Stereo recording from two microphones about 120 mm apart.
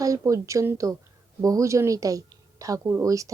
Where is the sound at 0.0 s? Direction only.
30° right (ahead or behind).